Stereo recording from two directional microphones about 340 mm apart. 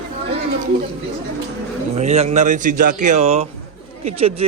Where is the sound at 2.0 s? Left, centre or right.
Centre.